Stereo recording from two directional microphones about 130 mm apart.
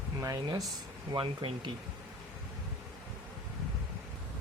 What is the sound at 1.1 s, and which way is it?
Speech, 40° right (ahead or behind).